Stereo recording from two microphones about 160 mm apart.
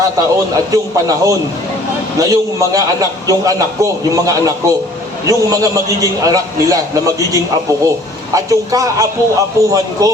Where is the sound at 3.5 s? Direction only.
20° right (ahead or behind).